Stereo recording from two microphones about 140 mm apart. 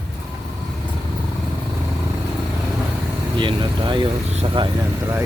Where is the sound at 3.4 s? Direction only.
35° right (ahead or behind).